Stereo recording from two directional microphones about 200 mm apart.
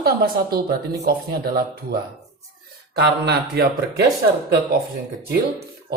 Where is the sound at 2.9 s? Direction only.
55° right (ahead or behind).